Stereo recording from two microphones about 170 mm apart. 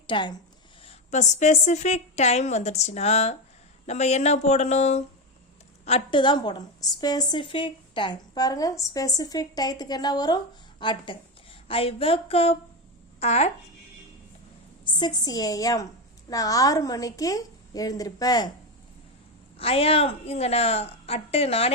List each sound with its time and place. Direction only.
0.1 s a woman's voice: 25° left (ahead or behind)
0.9 s a woman's voice: 40° left (ahead or behind)
14.8 s a woman's voice: 25° left (ahead or behind)
19.5 s speech: 35° left (ahead or behind)